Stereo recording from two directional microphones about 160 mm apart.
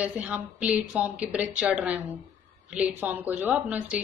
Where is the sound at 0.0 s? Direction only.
10° right (ahead or behind).